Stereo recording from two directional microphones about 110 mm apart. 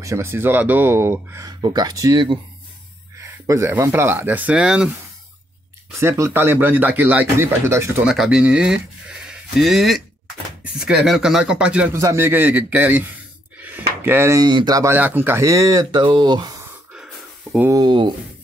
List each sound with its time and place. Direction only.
0.0 s a man's voice: 25° right (ahead or behind)
1.5 s a man's voice: 35° right (ahead or behind); by 4.9 s 10° right (ahead or behind)
5.9 s a man's voice: 25° right (ahead or behind)
8.0 s speech: 5° right (ahead or behind)
11.9 s speech: 25° right (ahead or behind)
13.6 s a sound: 15° right (ahead or behind)
14.4 s speech: 40° right (ahead or behind)
15.0 s speech: 15° right (ahead or behind); by 16.5 s 40° right (ahead or behind)
16.9 s a sound: 5° right (ahead or behind)
17.6 s speech: 40° right (ahead or behind)